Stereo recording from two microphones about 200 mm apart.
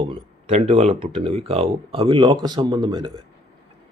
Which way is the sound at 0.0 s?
30° right (ahead or behind).